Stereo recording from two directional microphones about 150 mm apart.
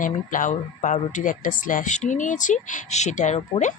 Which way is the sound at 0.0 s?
60° left (ahead or behind).